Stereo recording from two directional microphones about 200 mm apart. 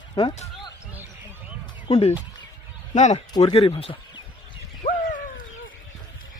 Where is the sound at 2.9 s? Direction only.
35° left (ahead or behind).